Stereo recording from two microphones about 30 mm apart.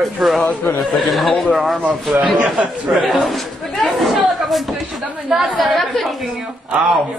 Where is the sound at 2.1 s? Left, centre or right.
Right.